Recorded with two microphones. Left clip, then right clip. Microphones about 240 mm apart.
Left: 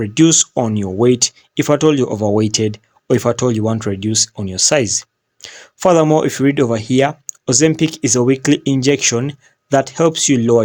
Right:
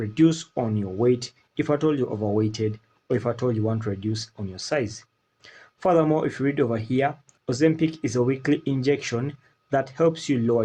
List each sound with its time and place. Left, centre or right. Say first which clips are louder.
0.0 s speech: left 9 dB; left